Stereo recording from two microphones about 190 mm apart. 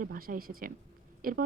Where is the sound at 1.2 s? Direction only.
50° right (ahead or behind).